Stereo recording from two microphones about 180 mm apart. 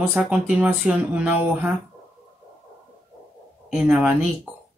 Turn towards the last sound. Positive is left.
turn(degrees=-5)  # may be behind; listen again after turning